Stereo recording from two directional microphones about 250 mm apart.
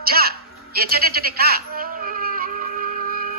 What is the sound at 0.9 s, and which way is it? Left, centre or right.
Music, right.